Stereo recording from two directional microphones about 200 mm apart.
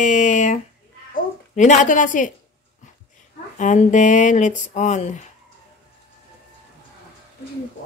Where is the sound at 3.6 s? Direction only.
40° left (ahead or behind).